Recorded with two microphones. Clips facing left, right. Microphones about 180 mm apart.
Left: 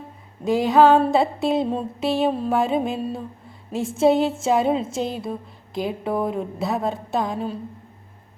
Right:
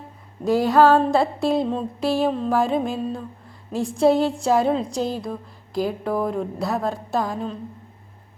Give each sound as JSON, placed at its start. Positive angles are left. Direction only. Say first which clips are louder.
{"t": 0.4, "sound": "a woman's voice", "louder": "even", "side_deg": 0}